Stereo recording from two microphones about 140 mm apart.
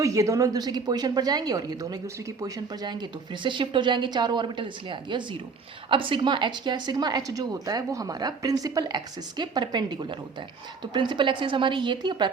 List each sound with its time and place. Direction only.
0.0 s a woman's voice: 20° right (ahead or behind)